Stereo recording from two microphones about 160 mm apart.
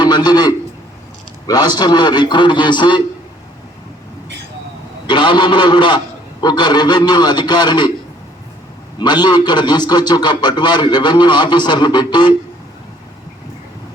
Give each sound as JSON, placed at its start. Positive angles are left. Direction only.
{"t": 0.0, "sound": "a man's voice", "side_deg": 25}
{"t": 5.0, "sound": "a man's voice", "side_deg": 30}
{"t": 9.0, "sound": "a man's voice", "side_deg": 25}